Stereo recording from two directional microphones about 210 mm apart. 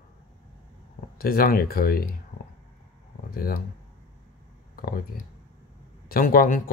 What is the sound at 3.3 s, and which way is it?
Speech, 45° left (ahead or behind).